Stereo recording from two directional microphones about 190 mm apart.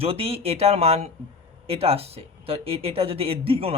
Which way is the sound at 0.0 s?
30° right (ahead or behind).